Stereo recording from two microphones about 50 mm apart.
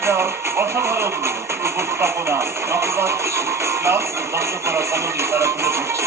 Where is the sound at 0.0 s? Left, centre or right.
Right.